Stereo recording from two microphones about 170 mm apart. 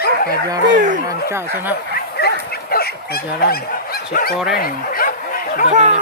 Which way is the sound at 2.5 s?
65° left (ahead or behind).